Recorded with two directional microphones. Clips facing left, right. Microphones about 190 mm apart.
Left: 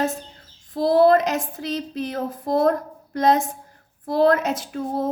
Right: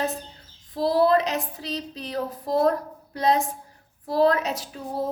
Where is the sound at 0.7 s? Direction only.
50° left (ahead or behind).